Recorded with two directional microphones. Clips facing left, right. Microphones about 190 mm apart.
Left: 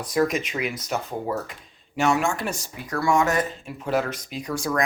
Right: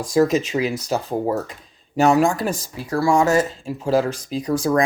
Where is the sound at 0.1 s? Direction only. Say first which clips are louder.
Right 6 dB; 30° right (ahead or behind).